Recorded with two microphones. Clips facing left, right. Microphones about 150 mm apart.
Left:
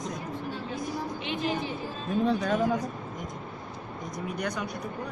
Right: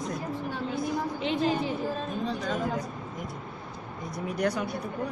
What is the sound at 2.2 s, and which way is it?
Speech, 55° left (ahead or behind).